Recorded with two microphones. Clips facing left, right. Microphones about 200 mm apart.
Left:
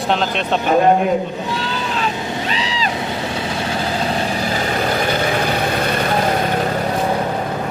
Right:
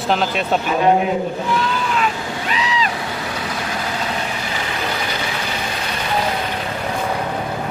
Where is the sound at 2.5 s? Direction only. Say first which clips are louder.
Even; 30° left (ahead or behind).